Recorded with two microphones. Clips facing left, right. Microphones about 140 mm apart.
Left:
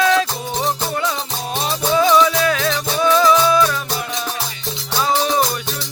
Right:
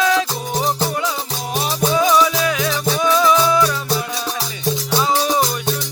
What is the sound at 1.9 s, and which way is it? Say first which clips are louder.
Music: left 2 dB; 10° right (ahead or behind).